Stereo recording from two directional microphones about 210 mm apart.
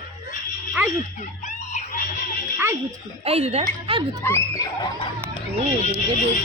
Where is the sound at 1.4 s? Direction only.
35° left (ahead or behind).